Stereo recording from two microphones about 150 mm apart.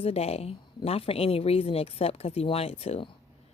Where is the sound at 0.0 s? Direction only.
45° left (ahead or behind).